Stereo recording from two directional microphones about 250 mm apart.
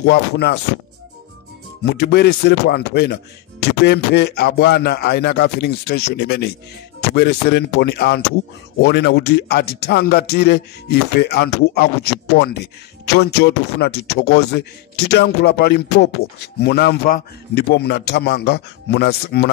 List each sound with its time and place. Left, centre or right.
0.0 s speech: left
1.9 s speech: left